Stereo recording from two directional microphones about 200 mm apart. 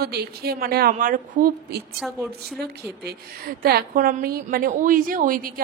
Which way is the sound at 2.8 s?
50° right (ahead or behind).